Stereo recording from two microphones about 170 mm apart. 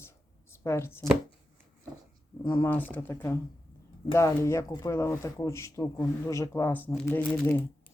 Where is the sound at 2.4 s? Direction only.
15° left (ahead or behind).